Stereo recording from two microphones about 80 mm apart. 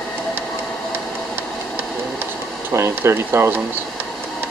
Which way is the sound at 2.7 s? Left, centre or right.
Right.